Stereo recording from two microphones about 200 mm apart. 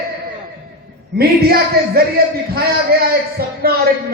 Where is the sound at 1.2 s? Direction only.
50° right (ahead or behind).